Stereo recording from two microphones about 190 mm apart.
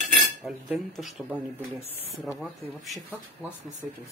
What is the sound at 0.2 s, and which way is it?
Speech, centre (ahead or behind).